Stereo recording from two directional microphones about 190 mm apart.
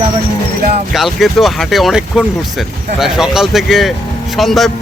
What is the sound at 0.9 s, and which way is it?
Speech, centre (ahead or behind).